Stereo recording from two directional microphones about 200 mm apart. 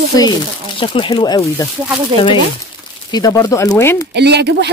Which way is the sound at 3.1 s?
20° left (ahead or behind).